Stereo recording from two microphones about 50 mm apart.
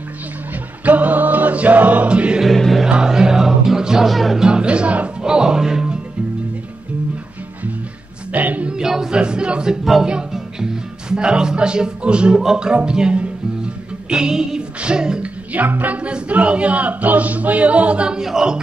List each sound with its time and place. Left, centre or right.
0.8 s music: right
2.4 s music: centre
2.8 s music: centre
4.4 s speech: centre
5.2 s music: centre
8.3 s music: right
8.6 s a sound: centre
10.0 s speech: centre
14.8 s music: centre
15.8 s speech: right
18.2 s music: centre